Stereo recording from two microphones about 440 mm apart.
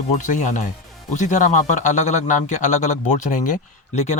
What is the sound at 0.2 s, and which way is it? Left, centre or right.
Speech, centre.